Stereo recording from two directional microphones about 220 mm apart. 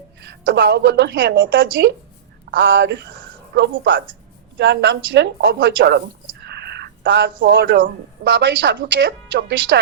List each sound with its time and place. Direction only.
0.2 s a woman's voice: 50° right (ahead or behind)